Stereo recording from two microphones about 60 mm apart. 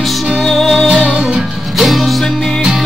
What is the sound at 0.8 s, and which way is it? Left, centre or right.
Music, centre.